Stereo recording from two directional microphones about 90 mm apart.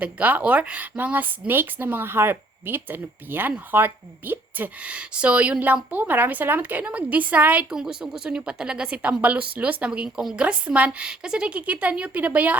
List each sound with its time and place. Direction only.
0.0 s a woman's voice: 20° right (ahead or behind)
7.7 s speech: 5° right (ahead or behind)